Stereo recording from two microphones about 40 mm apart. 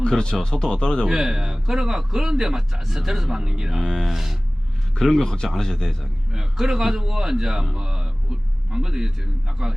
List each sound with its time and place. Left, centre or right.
0.1 s speech: centre
1.0 s a man's voice: centre
3.8 s speech: centre
4.1 s a sound: centre
4.9 s speech: centre
6.3 s a man's voice: centre